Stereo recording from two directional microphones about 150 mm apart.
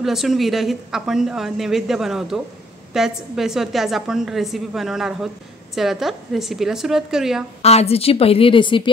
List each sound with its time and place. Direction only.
0.0 s a woman's voice: centre (ahead or behind)
7.6 s a woman's voice: 45° left (ahead or behind)